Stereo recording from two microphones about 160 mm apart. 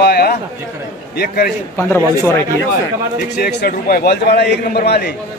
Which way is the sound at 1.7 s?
15° left (ahead or behind).